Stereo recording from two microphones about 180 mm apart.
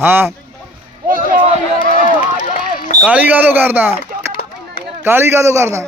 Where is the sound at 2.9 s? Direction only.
5° right (ahead or behind).